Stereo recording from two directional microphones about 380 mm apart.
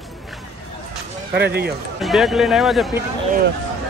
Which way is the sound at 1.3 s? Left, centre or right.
Right.